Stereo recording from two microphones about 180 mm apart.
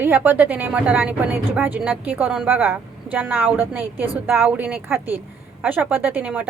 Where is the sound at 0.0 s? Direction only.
10° right (ahead or behind).